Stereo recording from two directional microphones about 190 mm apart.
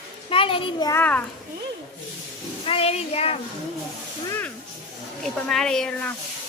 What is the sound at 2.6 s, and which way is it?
Speech, 30° left (ahead or behind).